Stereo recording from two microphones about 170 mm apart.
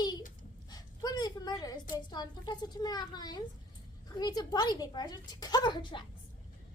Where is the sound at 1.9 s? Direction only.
25° left (ahead or behind).